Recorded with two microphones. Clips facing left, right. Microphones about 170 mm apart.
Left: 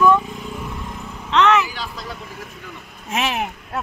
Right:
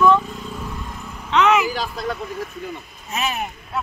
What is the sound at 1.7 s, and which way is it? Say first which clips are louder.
Speech: right 6 dB; 45° right (ahead or behind).